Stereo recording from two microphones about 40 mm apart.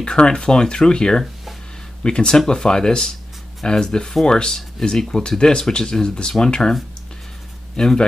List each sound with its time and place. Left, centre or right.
0.0 s speech: left
7.7 s speech: centre